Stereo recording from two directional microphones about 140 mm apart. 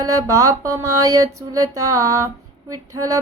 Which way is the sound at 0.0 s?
25° right (ahead or behind).